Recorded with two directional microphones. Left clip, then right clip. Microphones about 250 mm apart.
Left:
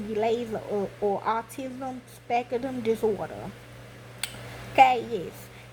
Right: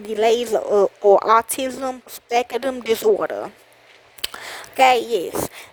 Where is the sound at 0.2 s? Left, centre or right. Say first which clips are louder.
Right 10 dB; right.